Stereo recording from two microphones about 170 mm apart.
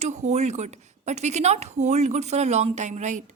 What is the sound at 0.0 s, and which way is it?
A woman's voice, 40° right (ahead or behind).